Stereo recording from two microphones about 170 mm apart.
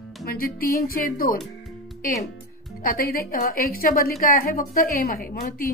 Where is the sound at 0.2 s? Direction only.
60° left (ahead or behind).